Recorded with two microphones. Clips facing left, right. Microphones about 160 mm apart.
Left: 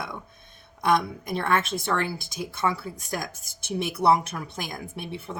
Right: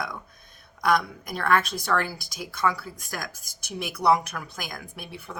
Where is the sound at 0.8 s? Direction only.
25° left (ahead or behind).